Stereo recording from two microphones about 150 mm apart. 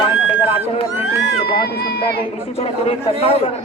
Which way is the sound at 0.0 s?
40° left (ahead or behind).